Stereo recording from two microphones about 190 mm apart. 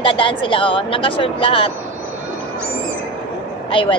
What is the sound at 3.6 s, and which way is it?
Speech, 25° left (ahead or behind).